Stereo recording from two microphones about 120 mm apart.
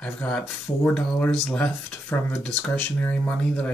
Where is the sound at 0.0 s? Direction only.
10° left (ahead or behind).